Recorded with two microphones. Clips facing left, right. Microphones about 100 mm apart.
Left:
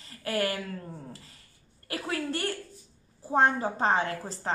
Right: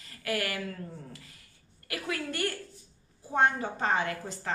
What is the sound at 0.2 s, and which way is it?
Speech, 30° left (ahead or behind).